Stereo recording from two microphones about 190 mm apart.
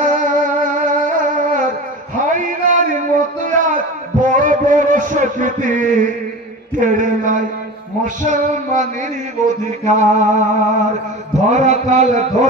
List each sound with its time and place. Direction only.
0.0 s music: 40° right (ahead or behind)
2.3 s a sound: 45° right (ahead or behind)
8.2 s music: 40° right (ahead or behind)
9.8 s music: 40° right (ahead or behind)